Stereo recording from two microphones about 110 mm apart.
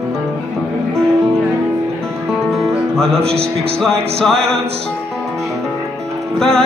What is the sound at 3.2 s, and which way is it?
Speech, 65° right (ahead or behind).